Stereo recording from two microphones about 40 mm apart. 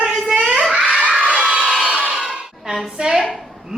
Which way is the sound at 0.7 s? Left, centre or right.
Right.